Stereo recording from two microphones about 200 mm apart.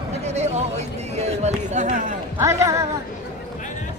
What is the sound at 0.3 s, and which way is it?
Speech, 35° right (ahead or behind).